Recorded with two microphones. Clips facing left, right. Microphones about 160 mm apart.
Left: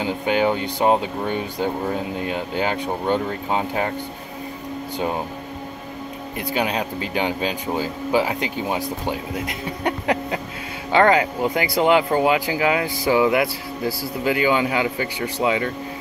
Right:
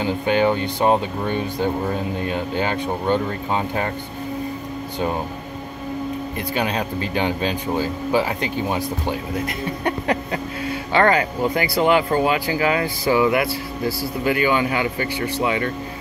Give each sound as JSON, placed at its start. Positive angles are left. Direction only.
{"t": 0.0, "sound": "speech", "side_deg": 15}
{"t": 4.9, "sound": "speech", "side_deg": 15}
{"t": 6.5, "sound": "speech", "side_deg": 15}